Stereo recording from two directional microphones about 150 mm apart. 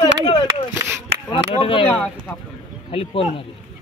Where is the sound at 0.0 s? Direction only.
30° left (ahead or behind).